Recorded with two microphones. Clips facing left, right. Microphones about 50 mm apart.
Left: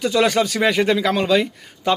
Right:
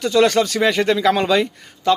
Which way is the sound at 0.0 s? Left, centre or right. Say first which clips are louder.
Right 2 dB; centre.